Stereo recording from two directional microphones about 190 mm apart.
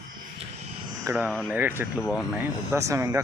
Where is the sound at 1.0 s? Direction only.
10° right (ahead or behind).